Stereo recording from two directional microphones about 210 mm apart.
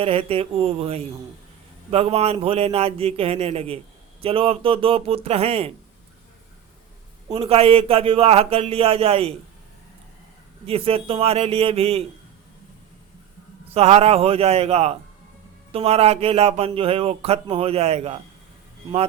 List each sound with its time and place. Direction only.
0.0 s speech: 25° right (ahead or behind)
7.3 s speech: 25° right (ahead or behind)
10.7 s speech: 25° right (ahead or behind)
13.7 s speech: 30° right (ahead or behind)